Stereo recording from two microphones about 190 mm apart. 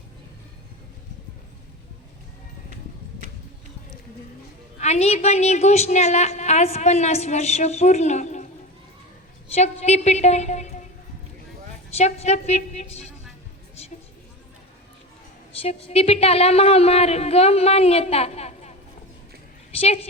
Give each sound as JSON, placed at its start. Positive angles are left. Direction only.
{"t": 4.8, "sound": "a woman's voice", "side_deg": 35}
{"t": 9.6, "sound": "a woman's voice", "side_deg": 35}
{"t": 11.9, "sound": "a woman's voice", "side_deg": 35}
{"t": 15.6, "sound": "a woman's voice", "side_deg": 30}
{"t": 19.7, "sound": "a woman's voice", "side_deg": 30}